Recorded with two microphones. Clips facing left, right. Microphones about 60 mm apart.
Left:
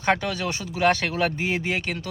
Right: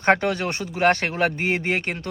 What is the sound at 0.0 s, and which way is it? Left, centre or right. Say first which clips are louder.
Speech: right 4 dB; right.